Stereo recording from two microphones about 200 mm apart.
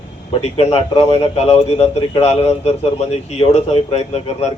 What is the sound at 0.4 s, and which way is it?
Speech, 30° left (ahead or behind).